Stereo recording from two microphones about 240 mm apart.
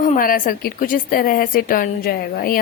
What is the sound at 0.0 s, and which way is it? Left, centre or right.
A woman's voice, left.